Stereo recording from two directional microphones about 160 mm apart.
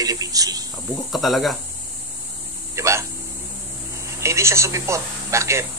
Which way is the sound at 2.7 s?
20° right (ahead or behind).